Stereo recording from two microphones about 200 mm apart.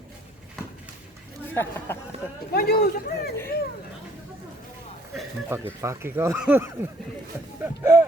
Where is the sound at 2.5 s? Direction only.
50° left (ahead or behind).